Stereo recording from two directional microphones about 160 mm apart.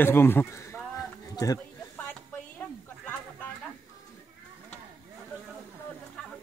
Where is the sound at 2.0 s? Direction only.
10° left (ahead or behind).